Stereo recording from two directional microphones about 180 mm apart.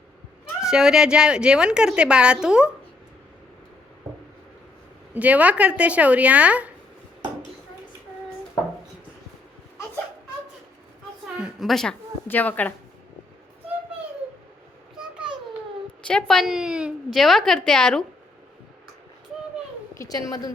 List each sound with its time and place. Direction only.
0.6 s speech: 5° right (ahead or behind)
5.1 s a woman's voice: 10° right (ahead or behind)
11.3 s a woman's voice: 5° right (ahead or behind)
16.0 s speech: 5° left (ahead or behind)
19.9 s a woman's voice: 20° left (ahead or behind)